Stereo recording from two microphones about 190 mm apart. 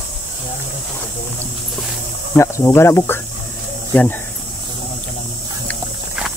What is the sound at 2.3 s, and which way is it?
Speech, 15° left (ahead or behind).